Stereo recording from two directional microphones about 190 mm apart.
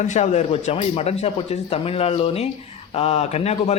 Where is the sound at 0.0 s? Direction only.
35° left (ahead or behind).